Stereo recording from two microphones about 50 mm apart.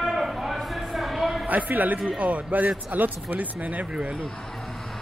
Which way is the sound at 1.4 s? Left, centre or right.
Right.